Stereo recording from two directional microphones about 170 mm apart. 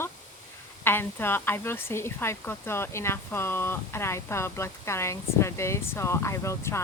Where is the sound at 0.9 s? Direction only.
15° left (ahead or behind).